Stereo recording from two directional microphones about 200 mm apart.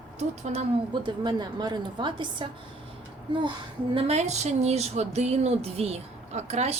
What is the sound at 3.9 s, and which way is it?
Speech, 30° right (ahead or behind).